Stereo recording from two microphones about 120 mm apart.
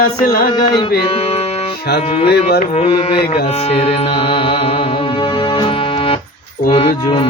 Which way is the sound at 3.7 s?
55° left (ahead or behind).